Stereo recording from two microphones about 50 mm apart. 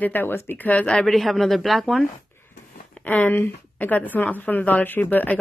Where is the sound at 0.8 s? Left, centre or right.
Left.